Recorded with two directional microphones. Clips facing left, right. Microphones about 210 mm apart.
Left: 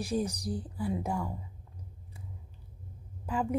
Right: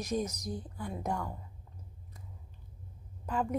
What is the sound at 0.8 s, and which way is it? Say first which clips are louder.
Speech: left 4 dB; 5° left (ahead or behind).